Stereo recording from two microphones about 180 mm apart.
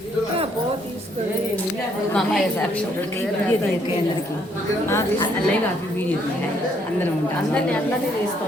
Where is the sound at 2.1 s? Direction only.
5° left (ahead or behind).